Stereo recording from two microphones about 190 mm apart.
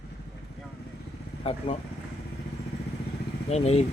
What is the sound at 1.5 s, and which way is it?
Speech, 35° left (ahead or behind).